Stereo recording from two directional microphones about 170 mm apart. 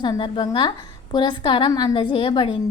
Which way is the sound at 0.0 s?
25° left (ahead or behind).